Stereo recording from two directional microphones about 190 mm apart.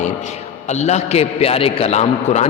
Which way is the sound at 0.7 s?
35° left (ahead or behind).